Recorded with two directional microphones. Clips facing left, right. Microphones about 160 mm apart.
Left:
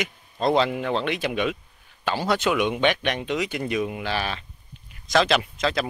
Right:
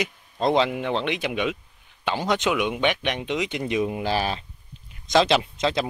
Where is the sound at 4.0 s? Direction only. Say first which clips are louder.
Right 3 dB; 40° right (ahead or behind).